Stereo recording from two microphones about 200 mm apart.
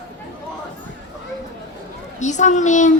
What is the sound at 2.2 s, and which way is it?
Speech, 35° left (ahead or behind).